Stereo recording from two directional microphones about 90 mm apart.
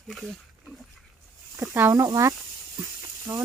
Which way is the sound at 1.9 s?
40° right (ahead or behind).